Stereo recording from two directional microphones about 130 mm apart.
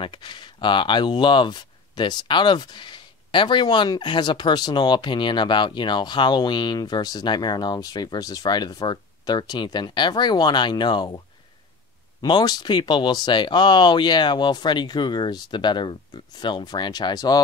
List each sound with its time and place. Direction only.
0.0 s speech: 35° left (ahead or behind)